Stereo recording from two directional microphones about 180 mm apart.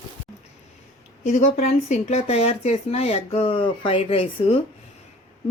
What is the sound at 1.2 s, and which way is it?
Speech, 40° left (ahead or behind).